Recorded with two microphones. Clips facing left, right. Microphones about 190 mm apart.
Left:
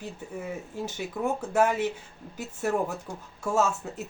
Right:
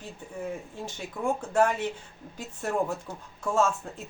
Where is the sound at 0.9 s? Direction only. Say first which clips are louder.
Even; 5° left (ahead or behind).